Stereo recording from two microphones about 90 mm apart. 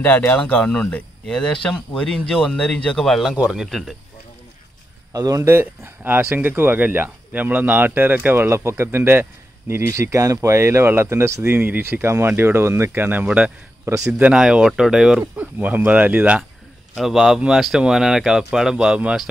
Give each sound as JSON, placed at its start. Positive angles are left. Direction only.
{"t": 0.0, "sound": "speech", "side_deg": 20}
{"t": 5.1, "sound": "speech", "side_deg": -40}
{"t": 5.5, "sound": "speech", "side_deg": -20}
{"t": 13.8, "sound": "speech", "side_deg": -35}
{"t": 14.1, "sound": "speech", "side_deg": -10}
{"t": 15.3, "sound": "speech", "side_deg": -20}
{"t": 16.9, "sound": "speech", "side_deg": -5}